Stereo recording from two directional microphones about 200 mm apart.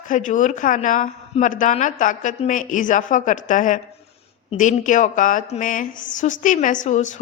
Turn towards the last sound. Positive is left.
turn(degrees=35)  # may be behind; listen again after turning